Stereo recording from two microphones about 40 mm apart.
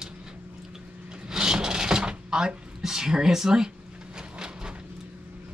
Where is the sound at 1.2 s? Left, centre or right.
Centre.